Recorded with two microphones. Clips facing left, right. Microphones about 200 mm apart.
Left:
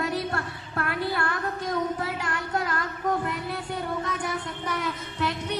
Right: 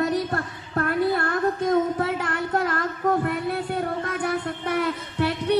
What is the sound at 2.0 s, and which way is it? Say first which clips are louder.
Child singing: right 5 dB; 55° right (ahead or behind).